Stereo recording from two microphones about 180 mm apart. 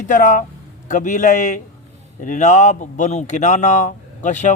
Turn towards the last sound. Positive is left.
turn(degrees=40)  # may be behind; listen again after turning